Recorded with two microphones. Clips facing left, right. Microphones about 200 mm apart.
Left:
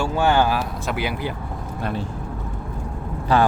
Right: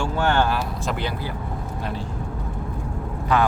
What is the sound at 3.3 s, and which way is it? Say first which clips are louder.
Speech: left 2 dB; 30° left (ahead or behind).